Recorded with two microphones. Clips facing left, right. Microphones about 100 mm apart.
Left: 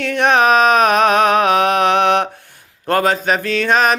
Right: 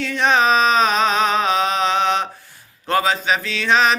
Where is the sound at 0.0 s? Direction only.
60° left (ahead or behind).